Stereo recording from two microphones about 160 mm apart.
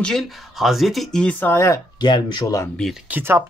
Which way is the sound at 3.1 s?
15° right (ahead or behind).